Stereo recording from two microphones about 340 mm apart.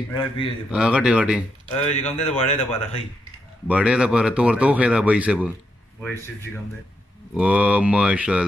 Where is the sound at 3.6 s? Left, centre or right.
Centre.